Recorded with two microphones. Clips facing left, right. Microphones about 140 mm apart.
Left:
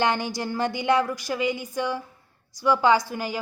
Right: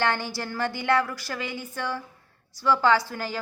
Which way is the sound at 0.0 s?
15° left (ahead or behind).